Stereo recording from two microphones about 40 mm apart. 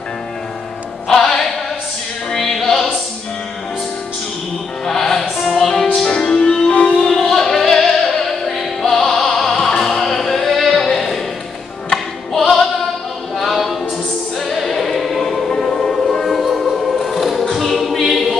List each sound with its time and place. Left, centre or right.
1.0 s music: centre
4.8 s music: centre
6.0 s music: left
6.7 s music: left
7.0 s music: centre
13.4 s a capella: centre
14.4 s music: centre
16.3 s choir: centre